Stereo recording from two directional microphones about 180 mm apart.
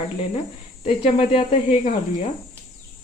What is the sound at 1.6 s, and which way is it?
Speech, 45° left (ahead or behind).